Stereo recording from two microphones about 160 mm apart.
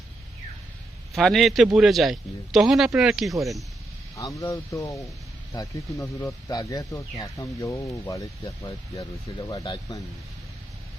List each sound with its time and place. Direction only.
1.1 s a man's voice: centre (ahead or behind)
4.4 s speech: 20° left (ahead or behind)